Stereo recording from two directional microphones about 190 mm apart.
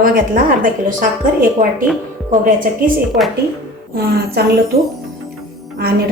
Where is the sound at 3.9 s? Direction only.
55° right (ahead or behind).